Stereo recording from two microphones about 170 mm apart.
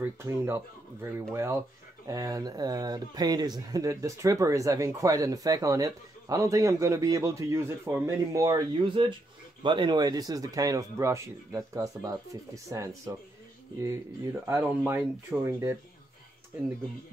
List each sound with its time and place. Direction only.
0.0 s speech: 15° right (ahead or behind)
14.4 s speech: 15° right (ahead or behind)